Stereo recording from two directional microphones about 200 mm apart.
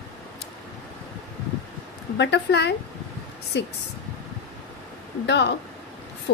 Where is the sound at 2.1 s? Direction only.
60° left (ahead or behind).